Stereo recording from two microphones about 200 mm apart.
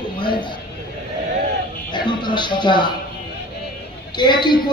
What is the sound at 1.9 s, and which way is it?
A man's voice, 20° left (ahead or behind).